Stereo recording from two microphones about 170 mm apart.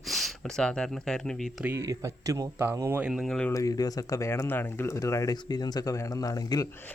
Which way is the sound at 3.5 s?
20° left (ahead or behind).